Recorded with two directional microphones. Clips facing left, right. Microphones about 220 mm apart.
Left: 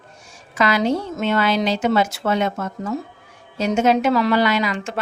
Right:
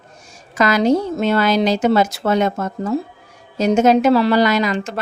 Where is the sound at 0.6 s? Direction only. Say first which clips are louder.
Right 4 dB; 40° right (ahead or behind).